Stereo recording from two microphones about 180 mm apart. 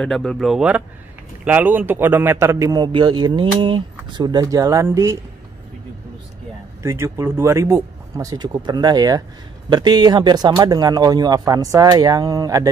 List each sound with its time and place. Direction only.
0.0 s a man's voice: 5° left (ahead or behind); by 5.1 s 15° right (ahead or behind)
6.8 s a man's voice: 15° right (ahead or behind)